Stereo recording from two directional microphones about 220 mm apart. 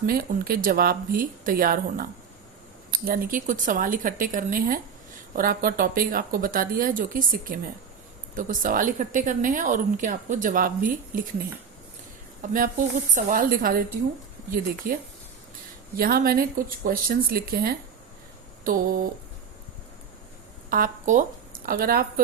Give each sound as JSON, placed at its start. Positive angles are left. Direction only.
{"t": 0.0, "sound": "speech", "side_deg": -45}
{"t": 12.4, "sound": "speech", "side_deg": -40}
{"t": 14.8, "sound": "speech", "side_deg": -40}
{"t": 20.7, "sound": "a woman's voice", "side_deg": -40}